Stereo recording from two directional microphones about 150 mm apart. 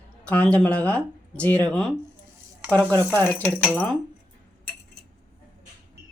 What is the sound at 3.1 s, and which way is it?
Speech, 15° left (ahead or behind).